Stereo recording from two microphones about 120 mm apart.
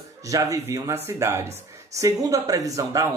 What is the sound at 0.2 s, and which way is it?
Speech, 25° right (ahead or behind).